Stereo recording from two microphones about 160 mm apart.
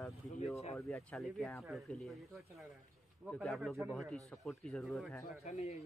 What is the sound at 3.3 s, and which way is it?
Speech, centre (ahead or behind).